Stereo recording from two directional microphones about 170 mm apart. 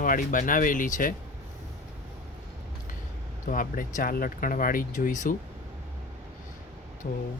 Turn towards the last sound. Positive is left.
turn(degrees=45)  # may be behind; listen again after turning